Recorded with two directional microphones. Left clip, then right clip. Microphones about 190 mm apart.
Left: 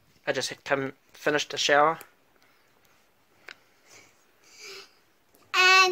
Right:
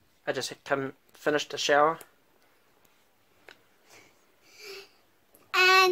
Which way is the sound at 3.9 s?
Centre (ahead or behind).